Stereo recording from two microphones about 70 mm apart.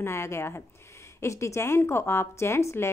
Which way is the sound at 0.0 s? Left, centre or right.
Left.